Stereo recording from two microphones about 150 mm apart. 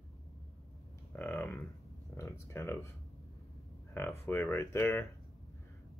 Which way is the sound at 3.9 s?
15° left (ahead or behind).